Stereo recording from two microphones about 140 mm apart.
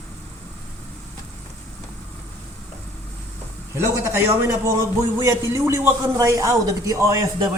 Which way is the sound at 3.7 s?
20° right (ahead or behind).